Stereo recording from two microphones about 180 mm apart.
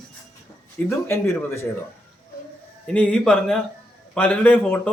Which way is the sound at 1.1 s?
15° left (ahead or behind).